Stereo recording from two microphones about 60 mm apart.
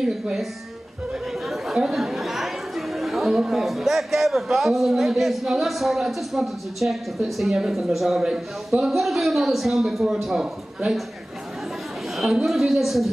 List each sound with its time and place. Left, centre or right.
0.0 s a woman's voice: centre
1.5 s chatter: centre
3.3 s a man's voice: centre
12.4 s a man's voice: centre